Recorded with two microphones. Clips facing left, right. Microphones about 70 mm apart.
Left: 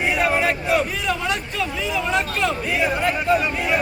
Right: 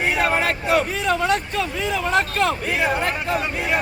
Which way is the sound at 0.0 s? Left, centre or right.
Right.